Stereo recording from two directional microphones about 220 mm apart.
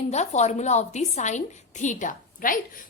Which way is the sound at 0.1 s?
30° left (ahead or behind).